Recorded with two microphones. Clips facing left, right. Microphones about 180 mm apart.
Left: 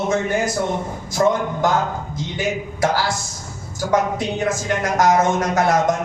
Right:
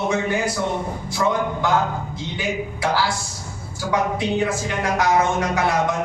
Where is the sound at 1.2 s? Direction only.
40° left (ahead or behind).